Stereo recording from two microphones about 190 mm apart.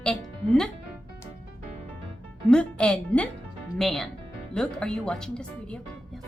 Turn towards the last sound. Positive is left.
turn(degrees=5)  # may be behind; listen again after turning